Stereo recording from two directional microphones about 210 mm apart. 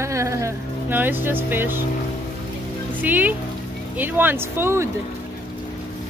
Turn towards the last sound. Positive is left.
turn(degrees=-10)  # may be behind; listen again after turning